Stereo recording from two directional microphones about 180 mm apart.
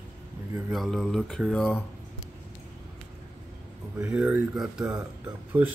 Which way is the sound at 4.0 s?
5° right (ahead or behind).